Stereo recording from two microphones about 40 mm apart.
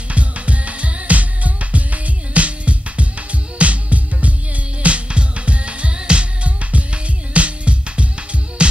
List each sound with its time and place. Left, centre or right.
0.1 s music: right